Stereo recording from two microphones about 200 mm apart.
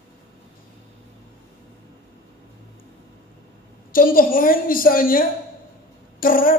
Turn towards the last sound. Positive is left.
turn(degrees=45)  # may be behind; listen again after turning